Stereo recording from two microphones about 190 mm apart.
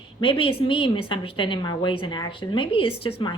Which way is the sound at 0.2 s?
30° left (ahead or behind).